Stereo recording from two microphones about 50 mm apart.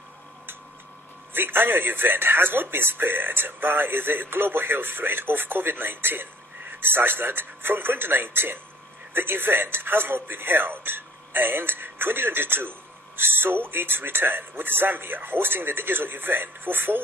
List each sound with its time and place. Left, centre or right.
1.3 s speech: right